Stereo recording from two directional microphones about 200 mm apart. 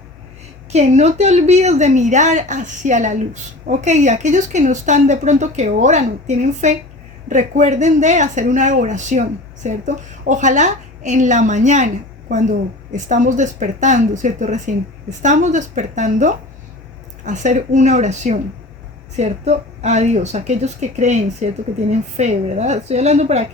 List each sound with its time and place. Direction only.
0.7 s a woman's voice: 35° right (ahead or behind)